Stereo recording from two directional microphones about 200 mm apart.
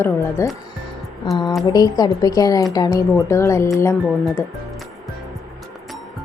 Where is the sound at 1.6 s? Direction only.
20° left (ahead or behind).